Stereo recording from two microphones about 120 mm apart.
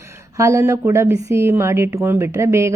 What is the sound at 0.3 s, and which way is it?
A woman's voice, 25° right (ahead or behind).